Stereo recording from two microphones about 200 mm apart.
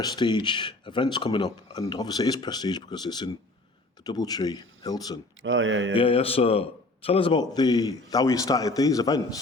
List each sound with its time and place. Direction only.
0.0 s speech: 20° left (ahead or behind)
5.4 s speech: 75° right (ahead or behind)
6.0 s speech: 30° left (ahead or behind)